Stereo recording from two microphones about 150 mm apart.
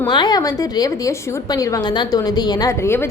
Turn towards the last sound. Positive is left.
turn(degrees=15)  # may be behind; listen again after turning